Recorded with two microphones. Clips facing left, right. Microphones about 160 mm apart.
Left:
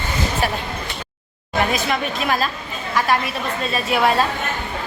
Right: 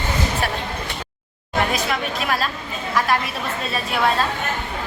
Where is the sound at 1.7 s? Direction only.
Centre (ahead or behind).